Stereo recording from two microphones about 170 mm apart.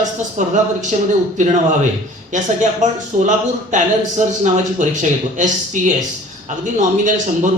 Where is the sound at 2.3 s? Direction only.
45° right (ahead or behind).